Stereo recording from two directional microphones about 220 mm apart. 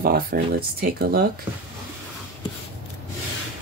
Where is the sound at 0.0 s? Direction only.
45° right (ahead or behind).